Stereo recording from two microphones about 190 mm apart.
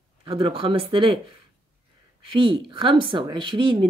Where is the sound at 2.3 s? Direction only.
25° right (ahead or behind).